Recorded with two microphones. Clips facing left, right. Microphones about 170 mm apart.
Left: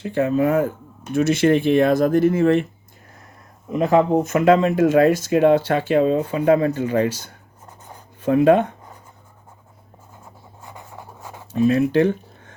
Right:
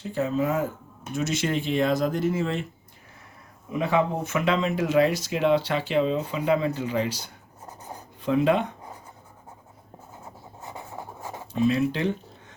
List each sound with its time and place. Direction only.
0.0 s speech: 65° left (ahead or behind)
3.7 s speech: 45° left (ahead or behind)
10.7 s writing: 10° right (ahead or behind)
11.5 s speech: 50° left (ahead or behind)